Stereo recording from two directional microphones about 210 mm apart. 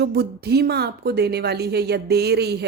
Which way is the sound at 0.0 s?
50° right (ahead or behind).